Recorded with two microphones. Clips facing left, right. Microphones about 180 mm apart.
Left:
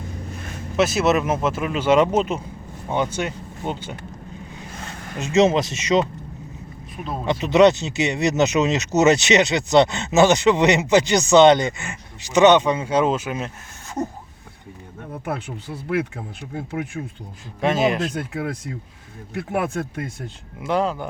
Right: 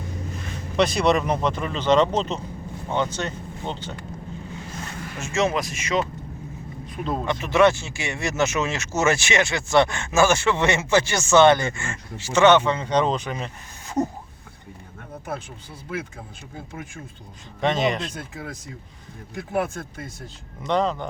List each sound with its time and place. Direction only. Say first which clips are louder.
0.8 s speech: left 1 dB; 5° left (ahead or behind)
5.2 s speech: left 6 dB; 20° left (ahead or behind)
7.3 s speech: left 4 dB; 20° left (ahead or behind)
15.2 s speech: left 4 dB; 70° left (ahead or behind)
17.6 s speech: left 3 dB; 5° left (ahead or behind)
18.1 s speech: left 8 dB; 70° left (ahead or behind)
20.6 s speech: left 1 dB; 10° left (ahead or behind)